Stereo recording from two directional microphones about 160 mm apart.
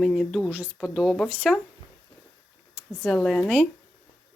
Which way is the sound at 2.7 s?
5° right (ahead or behind).